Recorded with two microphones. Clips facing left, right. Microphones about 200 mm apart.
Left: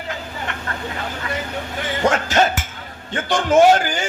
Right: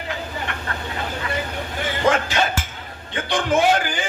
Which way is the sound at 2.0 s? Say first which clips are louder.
Left 1 dB; 45° left (ahead or behind).